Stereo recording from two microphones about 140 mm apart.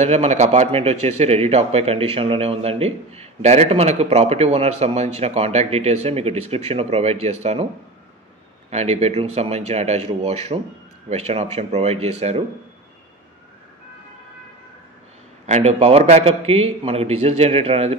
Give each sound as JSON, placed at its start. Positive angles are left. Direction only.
{"t": 0.0, "sound": "a man's voice", "side_deg": -50}
{"t": 8.6, "sound": "a man's voice", "side_deg": -50}
{"t": 15.4, "sound": "a man's voice", "side_deg": -50}